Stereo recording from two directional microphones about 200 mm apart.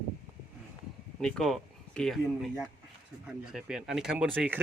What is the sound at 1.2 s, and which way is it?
Speech, 5° left (ahead or behind).